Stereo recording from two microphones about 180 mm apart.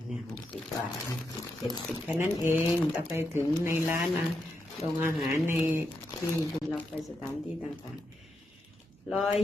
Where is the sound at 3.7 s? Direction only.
10° right (ahead or behind).